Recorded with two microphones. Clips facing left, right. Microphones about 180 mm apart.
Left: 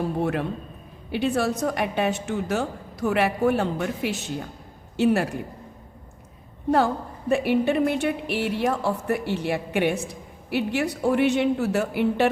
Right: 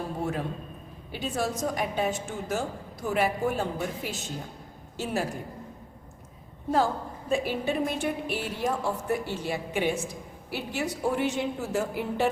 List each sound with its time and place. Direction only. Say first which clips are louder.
1.1 s a woman's voice: left 7 dB; 70° left (ahead or behind)
6.7 s a woman's voice: left 4 dB; 65° left (ahead or behind)